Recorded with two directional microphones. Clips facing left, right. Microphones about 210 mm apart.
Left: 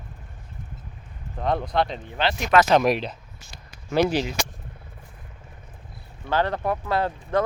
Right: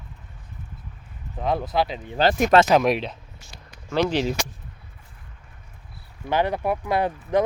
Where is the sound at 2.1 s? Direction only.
40° right (ahead or behind).